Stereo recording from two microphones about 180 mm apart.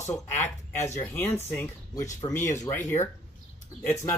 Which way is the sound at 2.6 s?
10° left (ahead or behind).